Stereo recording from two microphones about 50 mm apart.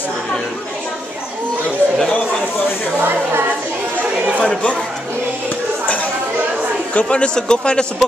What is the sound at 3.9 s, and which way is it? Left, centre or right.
Chatter, right.